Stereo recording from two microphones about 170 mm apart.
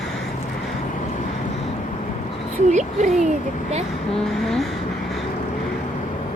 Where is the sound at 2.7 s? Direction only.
45° right (ahead or behind).